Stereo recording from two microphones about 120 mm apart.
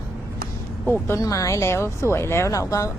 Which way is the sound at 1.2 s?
30° left (ahead or behind).